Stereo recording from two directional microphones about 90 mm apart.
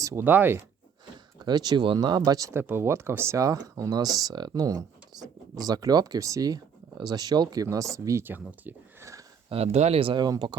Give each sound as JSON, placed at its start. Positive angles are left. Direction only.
{"t": 0.0, "sound": "speech", "side_deg": -40}
{"t": 0.3, "sound": "speech", "side_deg": -20}
{"t": 1.5, "sound": "speech", "side_deg": -50}
{"t": 2.5, "sound": "speech", "side_deg": -25}
{"t": 8.2, "sound": "speech", "side_deg": -20}
{"t": 9.5, "sound": "speech", "side_deg": -90}
{"t": 10.2, "sound": "speech", "side_deg": -50}